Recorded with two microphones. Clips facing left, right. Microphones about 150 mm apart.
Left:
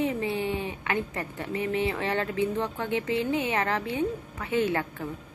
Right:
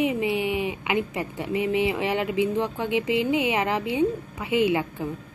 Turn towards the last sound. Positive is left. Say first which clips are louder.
# right 5 dB
turn(degrees=-15)  # may be behind; listen again after turning